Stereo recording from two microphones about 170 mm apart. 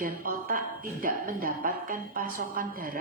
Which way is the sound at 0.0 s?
55° right (ahead or behind).